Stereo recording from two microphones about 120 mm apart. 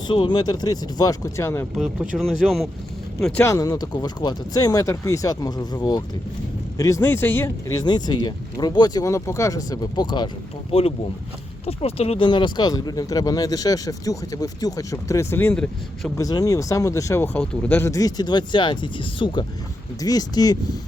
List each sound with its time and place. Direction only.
0.1 s speech: 40° left (ahead or behind); by 1.6 s 25° left (ahead or behind)
1.7 s speech: centre (ahead or behind)
3.4 s speech: 30° left (ahead or behind)
7.8 s speech: 35° left (ahead or behind)
10.7 s speech: 55° left (ahead or behind); by 16.1 s 10° left (ahead or behind)
16.1 s speech: 30° left (ahead or behind)
17.2 s speech: 10° left (ahead or behind); by 20.6 s 30° left (ahead or behind)